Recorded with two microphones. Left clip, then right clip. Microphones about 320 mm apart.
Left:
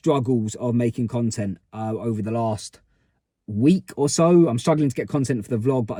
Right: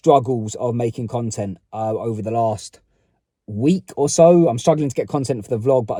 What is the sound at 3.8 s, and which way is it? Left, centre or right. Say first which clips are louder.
Speech: right 7 dB; right.